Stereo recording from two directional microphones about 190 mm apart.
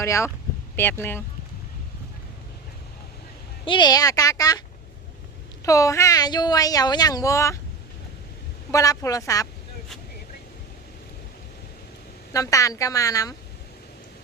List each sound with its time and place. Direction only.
0.0 s speech: 15° left (ahead or behind)
3.7 s speech: 20° left (ahead or behind)
5.6 s speech: 15° left (ahead or behind)
8.7 s speech: 15° left (ahead or behind)
12.3 s speech: 20° left (ahead or behind)